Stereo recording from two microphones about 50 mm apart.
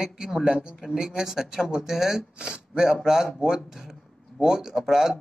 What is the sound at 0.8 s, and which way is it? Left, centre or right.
Speech, centre.